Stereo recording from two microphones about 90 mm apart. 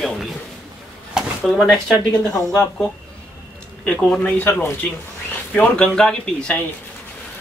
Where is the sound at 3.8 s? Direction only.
15° left (ahead or behind).